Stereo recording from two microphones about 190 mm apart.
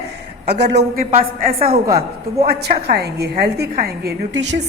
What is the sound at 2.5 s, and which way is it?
A woman's voice, 55° right (ahead or behind).